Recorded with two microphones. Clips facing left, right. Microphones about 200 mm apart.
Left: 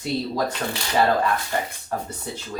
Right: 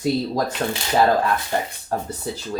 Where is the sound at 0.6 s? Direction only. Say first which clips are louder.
Right 4 dB; 40° right (ahead or behind).